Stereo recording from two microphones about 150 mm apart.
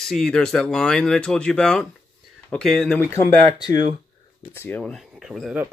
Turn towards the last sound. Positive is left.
turn(degrees=0)  # may be behind; listen again after turning